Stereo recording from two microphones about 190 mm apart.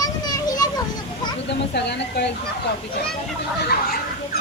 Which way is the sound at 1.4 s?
65° left (ahead or behind).